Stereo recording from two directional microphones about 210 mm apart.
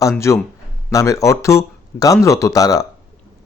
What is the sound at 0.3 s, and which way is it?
Speech, 15° left (ahead or behind).